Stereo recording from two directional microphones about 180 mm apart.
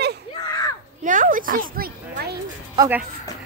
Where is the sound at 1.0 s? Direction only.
50° right (ahead or behind).